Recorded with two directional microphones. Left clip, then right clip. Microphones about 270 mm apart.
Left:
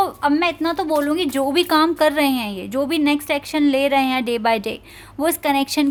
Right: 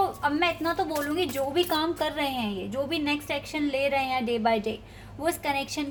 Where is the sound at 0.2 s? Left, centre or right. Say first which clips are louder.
Left 7 dB; left.